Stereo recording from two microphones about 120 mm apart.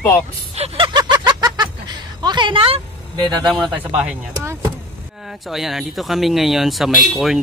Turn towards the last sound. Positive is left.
turn(degrees=0)  # may be behind; listen again after turning